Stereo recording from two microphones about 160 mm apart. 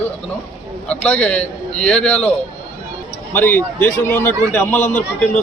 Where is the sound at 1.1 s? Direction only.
40° left (ahead or behind).